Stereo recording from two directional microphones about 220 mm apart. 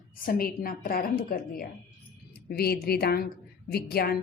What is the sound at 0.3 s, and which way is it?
A woman's voice, 40° left (ahead or behind).